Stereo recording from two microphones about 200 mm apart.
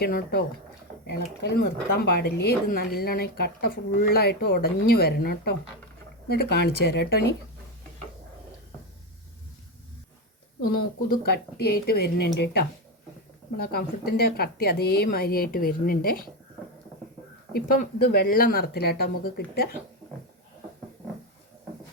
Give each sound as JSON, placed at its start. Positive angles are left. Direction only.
{"t": 0.0, "sound": "a woman's voice", "side_deg": 50}
{"t": 11.1, "sound": "a woman's voice", "side_deg": 50}
{"t": 13.6, "sound": "a woman's voice", "side_deg": 50}
{"t": 17.5, "sound": "a woman's voice", "side_deg": 50}